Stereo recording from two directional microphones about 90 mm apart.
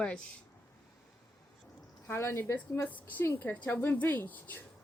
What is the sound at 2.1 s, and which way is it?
Speech, 30° left (ahead or behind).